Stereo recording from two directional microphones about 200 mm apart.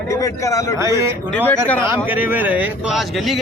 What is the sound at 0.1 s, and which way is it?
Speech, 15° left (ahead or behind).